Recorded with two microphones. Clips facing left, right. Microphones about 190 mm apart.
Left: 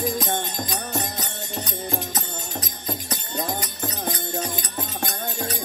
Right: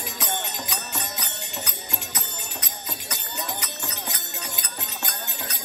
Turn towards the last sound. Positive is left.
turn(degrees=30)  # may be behind; listen again after turning